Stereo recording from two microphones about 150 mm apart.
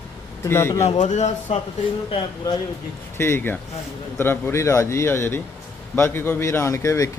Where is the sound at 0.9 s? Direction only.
50° left (ahead or behind).